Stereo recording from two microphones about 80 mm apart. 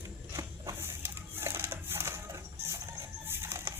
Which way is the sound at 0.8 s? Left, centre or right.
Right.